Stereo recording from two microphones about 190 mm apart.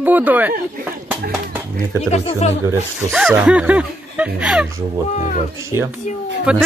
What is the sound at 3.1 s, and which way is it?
Speech, centre (ahead or behind).